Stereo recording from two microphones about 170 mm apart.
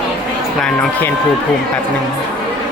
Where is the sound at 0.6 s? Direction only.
5° left (ahead or behind).